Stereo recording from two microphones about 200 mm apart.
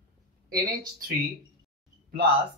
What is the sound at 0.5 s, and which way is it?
Speech, 50° right (ahead or behind).